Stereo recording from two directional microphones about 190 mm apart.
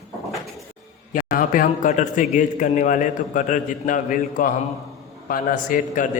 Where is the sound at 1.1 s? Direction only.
45° left (ahead or behind).